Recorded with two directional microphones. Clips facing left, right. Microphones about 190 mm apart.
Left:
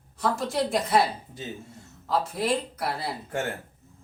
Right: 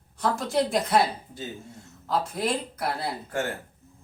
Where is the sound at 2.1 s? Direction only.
Centre (ahead or behind).